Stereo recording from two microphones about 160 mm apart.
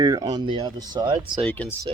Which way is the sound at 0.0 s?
25° right (ahead or behind).